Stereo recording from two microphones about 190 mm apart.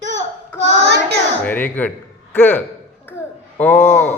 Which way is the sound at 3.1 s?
10° left (ahead or behind).